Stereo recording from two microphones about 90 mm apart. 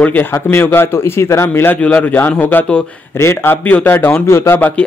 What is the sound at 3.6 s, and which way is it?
Speech, 20° left (ahead or behind).